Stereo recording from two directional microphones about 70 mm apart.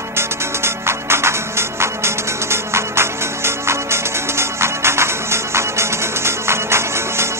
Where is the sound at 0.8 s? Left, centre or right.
Right.